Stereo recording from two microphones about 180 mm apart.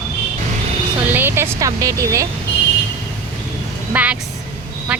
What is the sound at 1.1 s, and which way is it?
Speech, 10° right (ahead or behind).